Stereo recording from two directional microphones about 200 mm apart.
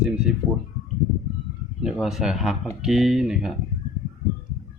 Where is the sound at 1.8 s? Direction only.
Centre (ahead or behind).